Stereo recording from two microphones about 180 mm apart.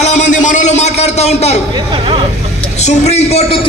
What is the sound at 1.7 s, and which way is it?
Speech, 25° right (ahead or behind).